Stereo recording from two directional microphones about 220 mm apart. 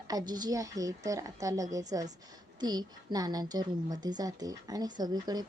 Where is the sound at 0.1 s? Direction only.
15° right (ahead or behind).